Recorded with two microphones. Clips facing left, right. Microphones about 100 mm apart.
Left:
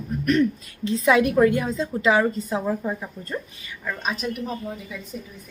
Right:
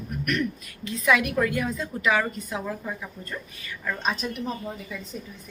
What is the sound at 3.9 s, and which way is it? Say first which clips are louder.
A woman's voice: left 1 dB; 5° left (ahead or behind).